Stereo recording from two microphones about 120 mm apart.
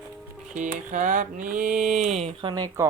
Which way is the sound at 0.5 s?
90° right.